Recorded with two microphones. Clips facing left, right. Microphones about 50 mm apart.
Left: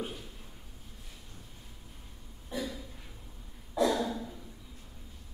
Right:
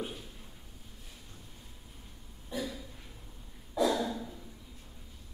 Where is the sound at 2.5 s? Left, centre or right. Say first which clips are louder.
Even; centre.